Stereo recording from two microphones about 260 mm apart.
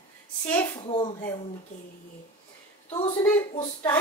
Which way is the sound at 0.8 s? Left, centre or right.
Left.